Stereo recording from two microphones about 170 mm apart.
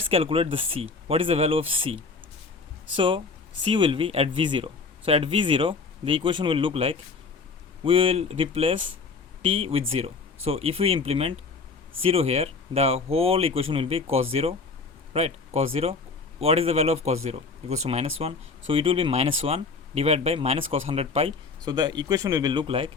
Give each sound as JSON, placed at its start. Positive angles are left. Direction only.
{"t": 0.1, "sound": "speech", "side_deg": -35}
{"t": 21.6, "sound": "speech", "side_deg": -25}